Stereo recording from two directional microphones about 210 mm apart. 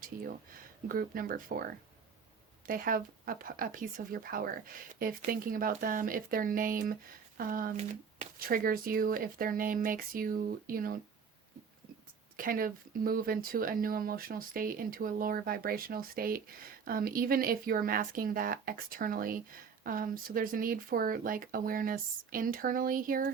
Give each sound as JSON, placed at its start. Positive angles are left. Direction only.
{"t": 0.9, "sound": "speech", "side_deg": -45}
{"t": 2.6, "sound": "speech", "side_deg": -40}
{"t": 12.4, "sound": "speech", "side_deg": -40}